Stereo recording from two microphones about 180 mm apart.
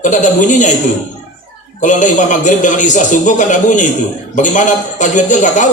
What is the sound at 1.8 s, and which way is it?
Speech, 45° left (ahead or behind).